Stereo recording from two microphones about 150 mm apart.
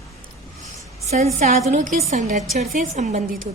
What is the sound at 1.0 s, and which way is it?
A woman's voice, 50° right (ahead or behind).